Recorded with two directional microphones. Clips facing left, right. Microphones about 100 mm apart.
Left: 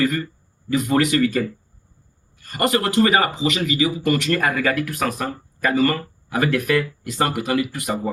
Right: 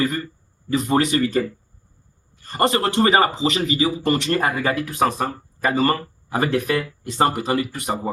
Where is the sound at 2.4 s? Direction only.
30° right (ahead or behind).